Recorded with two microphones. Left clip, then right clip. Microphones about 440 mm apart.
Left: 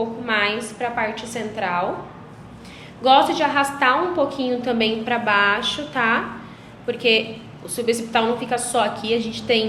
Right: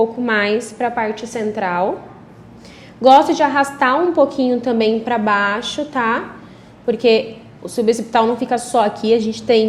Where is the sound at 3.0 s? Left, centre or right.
Right.